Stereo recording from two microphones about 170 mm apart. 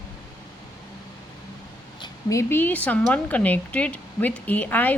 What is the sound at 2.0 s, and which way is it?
Speech, 20° left (ahead or behind).